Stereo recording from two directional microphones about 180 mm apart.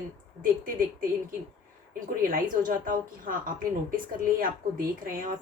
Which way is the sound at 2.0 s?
50° right (ahead or behind).